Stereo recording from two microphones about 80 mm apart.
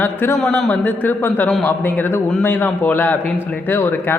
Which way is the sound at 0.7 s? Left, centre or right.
Left.